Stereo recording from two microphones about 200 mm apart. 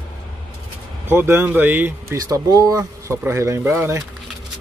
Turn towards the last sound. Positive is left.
turn(degrees=-10)  # may be behind; listen again after turning